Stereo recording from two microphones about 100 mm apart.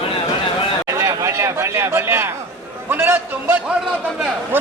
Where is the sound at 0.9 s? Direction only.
30° right (ahead or behind).